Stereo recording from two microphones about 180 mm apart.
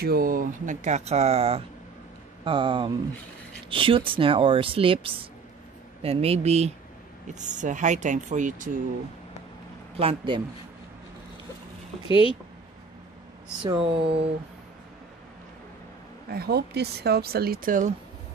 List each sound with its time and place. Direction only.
0.0 s a woman's voice: 55° right (ahead or behind)
9.9 s a woman's voice: 30° right (ahead or behind)
12.1 s speech: 30° left (ahead or behind)
13.6 s speech: 25° right (ahead or behind)
16.3 s speech: 60° right (ahead or behind)